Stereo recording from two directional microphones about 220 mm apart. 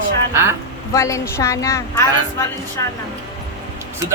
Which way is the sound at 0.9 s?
15° left (ahead or behind).